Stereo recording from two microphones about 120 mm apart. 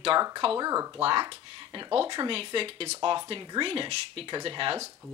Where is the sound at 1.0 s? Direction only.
45° right (ahead or behind).